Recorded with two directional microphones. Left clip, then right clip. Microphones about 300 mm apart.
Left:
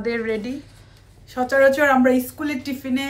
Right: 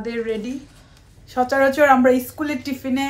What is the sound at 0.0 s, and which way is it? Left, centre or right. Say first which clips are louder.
A woman's voice: left 1 dB; centre.